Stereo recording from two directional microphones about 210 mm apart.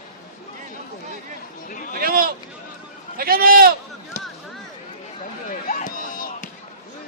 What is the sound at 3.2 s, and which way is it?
Sheep, 45° right (ahead or behind).